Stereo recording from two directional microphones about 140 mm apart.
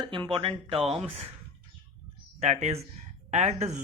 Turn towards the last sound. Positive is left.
turn(degrees=-55)  # may be behind; listen again after turning